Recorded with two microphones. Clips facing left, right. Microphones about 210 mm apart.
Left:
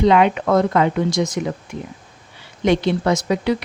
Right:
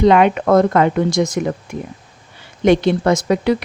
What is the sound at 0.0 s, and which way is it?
Speech, 50° right (ahead or behind).